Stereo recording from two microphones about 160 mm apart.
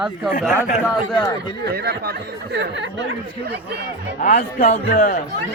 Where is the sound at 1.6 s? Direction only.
90° right.